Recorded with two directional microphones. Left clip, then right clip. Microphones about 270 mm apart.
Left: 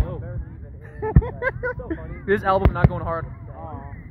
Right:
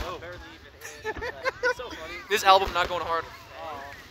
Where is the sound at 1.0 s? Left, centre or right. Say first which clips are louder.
Left 6 dB; centre.